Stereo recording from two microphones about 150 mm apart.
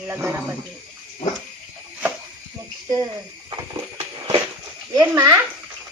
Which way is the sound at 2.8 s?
25° right (ahead or behind).